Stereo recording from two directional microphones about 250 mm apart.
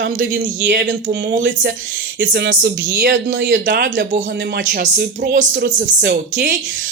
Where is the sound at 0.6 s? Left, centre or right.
Right.